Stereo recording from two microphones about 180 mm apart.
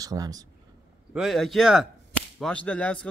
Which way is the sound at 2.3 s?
5° left (ahead or behind).